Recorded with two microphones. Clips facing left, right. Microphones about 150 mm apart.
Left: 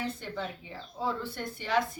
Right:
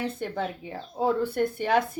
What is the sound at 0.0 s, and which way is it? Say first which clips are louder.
A woman's voice: right 5 dB; 60° right (ahead or behind).